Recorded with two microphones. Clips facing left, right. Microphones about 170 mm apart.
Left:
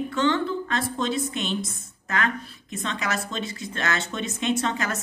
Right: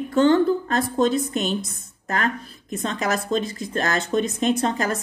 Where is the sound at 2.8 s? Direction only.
40° right (ahead or behind).